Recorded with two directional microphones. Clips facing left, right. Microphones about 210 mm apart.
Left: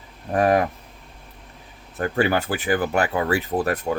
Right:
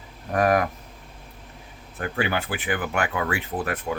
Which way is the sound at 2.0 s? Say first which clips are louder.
Left 5 dB; 40° left (ahead or behind).